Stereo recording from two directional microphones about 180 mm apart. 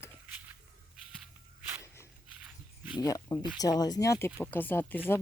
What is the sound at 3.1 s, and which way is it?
Speech, 20° left (ahead or behind).